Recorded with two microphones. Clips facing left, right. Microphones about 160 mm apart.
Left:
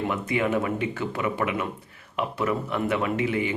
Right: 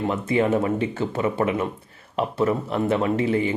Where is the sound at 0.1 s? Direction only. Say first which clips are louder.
Right 6 dB; 30° right (ahead or behind).